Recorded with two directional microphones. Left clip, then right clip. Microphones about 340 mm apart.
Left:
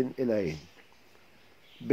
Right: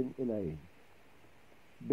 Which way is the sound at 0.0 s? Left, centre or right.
Left.